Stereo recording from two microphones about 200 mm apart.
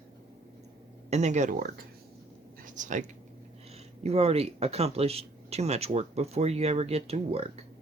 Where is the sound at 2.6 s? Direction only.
40° right (ahead or behind).